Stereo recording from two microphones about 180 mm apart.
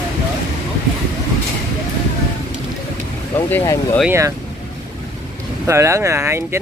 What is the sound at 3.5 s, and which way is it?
Speech, 15° left (ahead or behind).